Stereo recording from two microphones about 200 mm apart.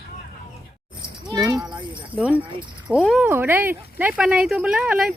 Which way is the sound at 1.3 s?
20° right (ahead or behind).